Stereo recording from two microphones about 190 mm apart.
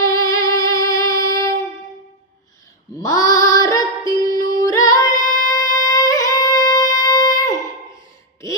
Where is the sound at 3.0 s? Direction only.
15° left (ahead or behind).